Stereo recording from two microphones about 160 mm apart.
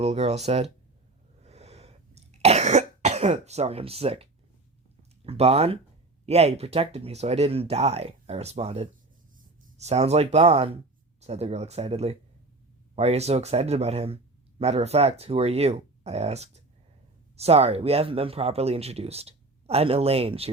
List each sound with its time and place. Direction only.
0.0 s speech: 40° right (ahead or behind)
1.4 s cough: 40° right (ahead or behind)
5.2 s speech: 40° right (ahead or behind)